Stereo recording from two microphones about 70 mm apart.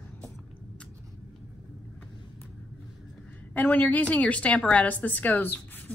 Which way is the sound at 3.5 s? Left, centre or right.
Left.